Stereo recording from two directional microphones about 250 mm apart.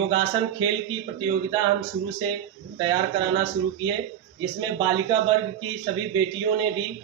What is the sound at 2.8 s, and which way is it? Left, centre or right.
Speech, centre.